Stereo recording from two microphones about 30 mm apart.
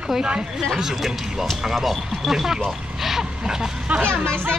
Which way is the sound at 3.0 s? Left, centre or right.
Centre.